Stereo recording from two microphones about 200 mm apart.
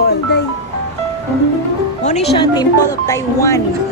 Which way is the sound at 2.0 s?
35° left (ahead or behind).